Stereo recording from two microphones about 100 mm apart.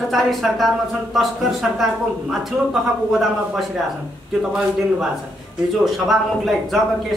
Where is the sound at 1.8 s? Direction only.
Centre (ahead or behind).